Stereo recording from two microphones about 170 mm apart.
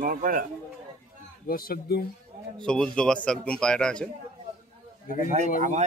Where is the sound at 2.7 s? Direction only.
5° left (ahead or behind).